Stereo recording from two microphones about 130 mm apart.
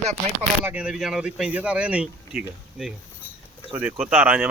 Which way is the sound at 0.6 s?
10° right (ahead or behind).